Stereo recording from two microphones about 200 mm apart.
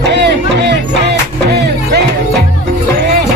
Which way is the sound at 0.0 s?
60° right (ahead or behind).